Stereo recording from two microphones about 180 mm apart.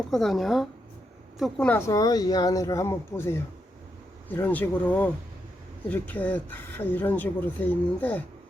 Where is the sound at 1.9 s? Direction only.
20° left (ahead or behind).